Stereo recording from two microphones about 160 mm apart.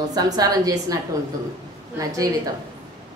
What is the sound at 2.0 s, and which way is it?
Speech, 20° right (ahead or behind).